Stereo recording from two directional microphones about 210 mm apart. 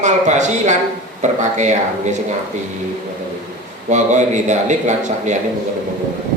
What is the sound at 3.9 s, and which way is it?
A man's voice, 35° right (ahead or behind).